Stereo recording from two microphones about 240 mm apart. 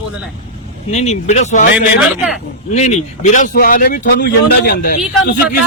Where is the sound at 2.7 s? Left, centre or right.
Left.